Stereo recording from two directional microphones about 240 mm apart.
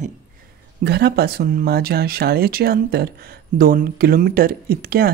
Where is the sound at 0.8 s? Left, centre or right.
Right.